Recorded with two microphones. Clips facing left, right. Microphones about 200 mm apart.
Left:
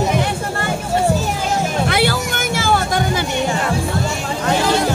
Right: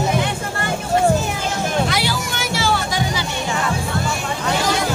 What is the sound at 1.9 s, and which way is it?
Music, 55° left (ahead or behind).